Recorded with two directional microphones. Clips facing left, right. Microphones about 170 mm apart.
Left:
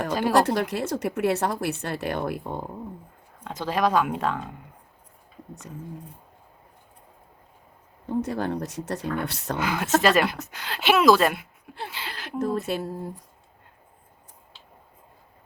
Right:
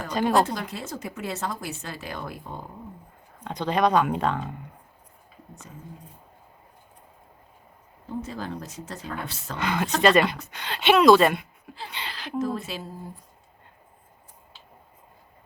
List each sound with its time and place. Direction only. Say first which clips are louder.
0.1 s speech: right 3 dB; 5° left (ahead or behind)
0.3 s speech: left 3 dB; 65° left (ahead or behind)
3.4 s speech: right 1 dB; 5° left (ahead or behind)
8.2 s speech: left 8 dB; 65° left (ahead or behind)
9.6 s speech: left 1 dB; 5° left (ahead or behind)
12.1 s speech: left 1 dB; 50° left (ahead or behind)